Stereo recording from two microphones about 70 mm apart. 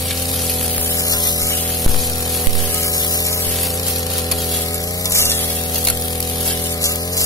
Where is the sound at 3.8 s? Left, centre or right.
Left.